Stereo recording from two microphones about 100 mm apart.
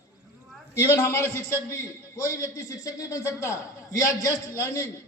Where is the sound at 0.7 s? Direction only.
25° left (ahead or behind).